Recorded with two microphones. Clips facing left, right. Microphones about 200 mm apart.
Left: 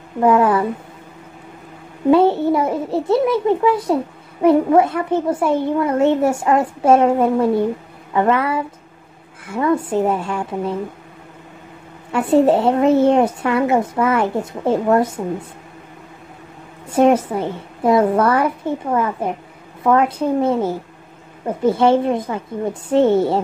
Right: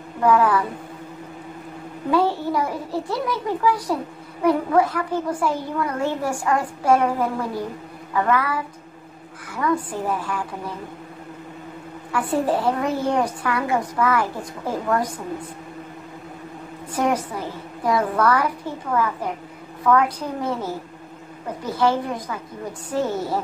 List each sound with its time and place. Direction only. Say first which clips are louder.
0.2 s a child's voice: left 4 dB; 25° left (ahead or behind)
2.0 s a child's voice: left 8 dB; 25° left (ahead or behind)
12.1 s a child's voice: left 8 dB; 25° left (ahead or behind)
16.9 s a woman's voice: left 9 dB; 25° left (ahead or behind)
21.6 s a child's voice: left 7 dB; 25° left (ahead or behind)